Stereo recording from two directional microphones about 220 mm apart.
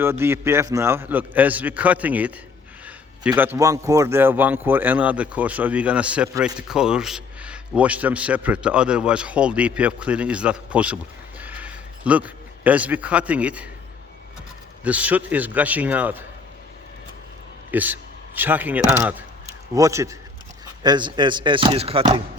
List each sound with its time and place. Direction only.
0.0 s a man's voice: 10° right (ahead or behind)
11.3 s a sound: 5° right (ahead or behind)
14.8 s a man's voice: 5° right (ahead or behind)
17.7 s a man's voice: 10° right (ahead or behind); by 22.2 s 25° right (ahead or behind)